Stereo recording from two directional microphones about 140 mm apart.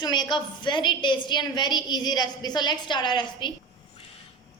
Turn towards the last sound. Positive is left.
turn(degrees=35)  # may be behind; listen again after turning